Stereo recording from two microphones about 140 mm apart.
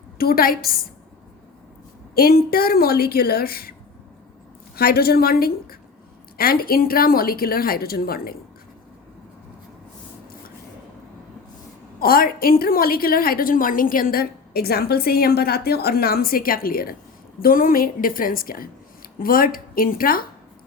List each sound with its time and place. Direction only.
0.2 s a woman's voice: 90° left
2.1 s a woman's voice: 90° left
4.8 s a woman's voice: 90° left
11.9 s a woman's voice: 90° left